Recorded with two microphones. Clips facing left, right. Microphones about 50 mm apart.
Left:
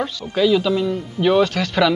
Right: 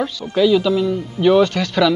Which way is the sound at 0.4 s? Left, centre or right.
Centre.